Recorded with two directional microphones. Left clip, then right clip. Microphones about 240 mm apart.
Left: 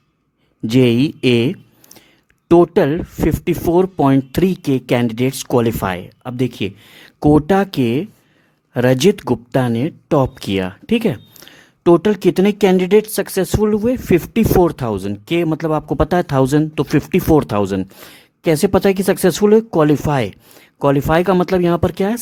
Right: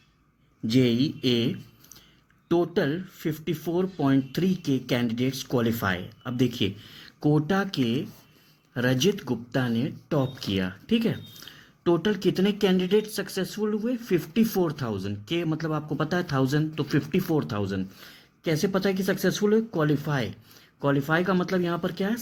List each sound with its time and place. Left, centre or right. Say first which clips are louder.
0.7 s speech: left 10 dB; left